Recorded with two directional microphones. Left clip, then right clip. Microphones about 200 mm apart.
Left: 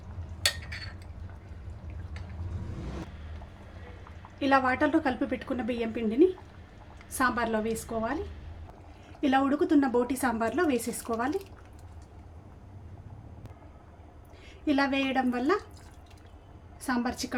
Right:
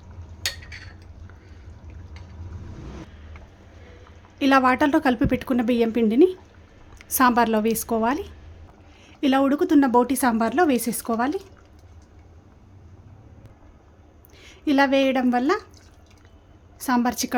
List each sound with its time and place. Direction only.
4.4 s speech: 60° right (ahead or behind)
9.2 s speech: 50° right (ahead or behind)
14.4 s a woman's voice: 55° right (ahead or behind)
16.8 s a woman's voice: 55° right (ahead or behind)